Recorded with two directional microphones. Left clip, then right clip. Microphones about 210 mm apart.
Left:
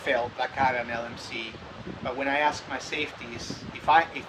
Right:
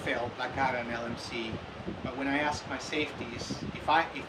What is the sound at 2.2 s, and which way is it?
Speech, 10° left (ahead or behind).